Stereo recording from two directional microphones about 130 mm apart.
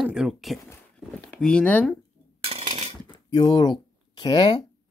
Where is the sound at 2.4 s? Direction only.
50° right (ahead or behind).